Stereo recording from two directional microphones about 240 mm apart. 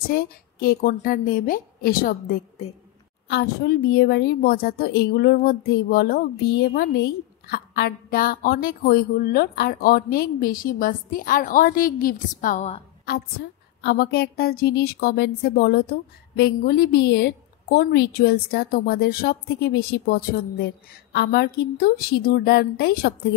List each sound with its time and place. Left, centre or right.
0.1 s a woman's voice: left
13.0 s a woman's voice: left